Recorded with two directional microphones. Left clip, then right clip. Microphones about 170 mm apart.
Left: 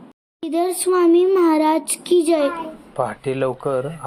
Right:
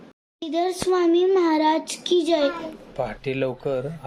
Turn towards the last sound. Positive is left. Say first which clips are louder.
# left 4 dB
turn(degrees=10)  # may be behind; listen again after turning